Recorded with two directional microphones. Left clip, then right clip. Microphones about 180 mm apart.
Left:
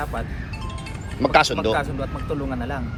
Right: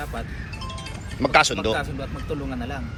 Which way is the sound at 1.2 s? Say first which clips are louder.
Left 1 dB; 15° left (ahead or behind).